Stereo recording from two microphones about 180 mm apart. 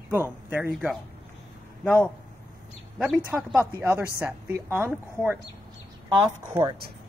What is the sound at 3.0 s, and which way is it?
Speech, 5° right (ahead or behind).